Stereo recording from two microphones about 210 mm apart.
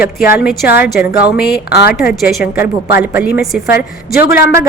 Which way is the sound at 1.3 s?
50° left (ahead or behind).